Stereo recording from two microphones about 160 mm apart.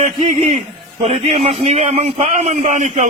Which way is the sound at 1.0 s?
40° right (ahead or behind).